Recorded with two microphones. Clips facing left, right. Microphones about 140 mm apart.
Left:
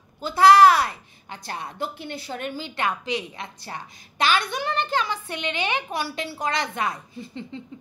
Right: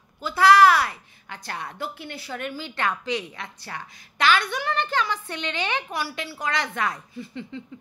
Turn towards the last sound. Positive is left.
turn(degrees=20)  # may be behind; listen again after turning